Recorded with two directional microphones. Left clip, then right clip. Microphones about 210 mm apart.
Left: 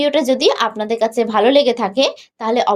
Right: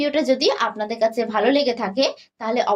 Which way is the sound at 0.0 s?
35° left (ahead or behind).